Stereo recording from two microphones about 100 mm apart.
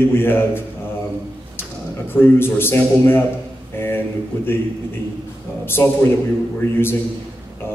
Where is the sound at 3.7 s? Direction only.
25° left (ahead or behind).